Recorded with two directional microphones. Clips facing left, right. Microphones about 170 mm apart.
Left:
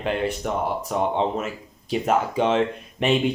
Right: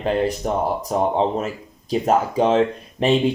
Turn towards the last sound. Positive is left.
turn(degrees=-35)  # may be behind; listen again after turning